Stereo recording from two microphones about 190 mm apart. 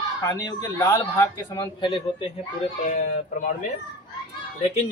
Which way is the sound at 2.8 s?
40° left (ahead or behind).